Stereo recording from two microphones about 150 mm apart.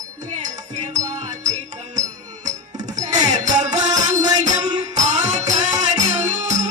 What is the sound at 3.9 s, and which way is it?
Music, 25° right (ahead or behind).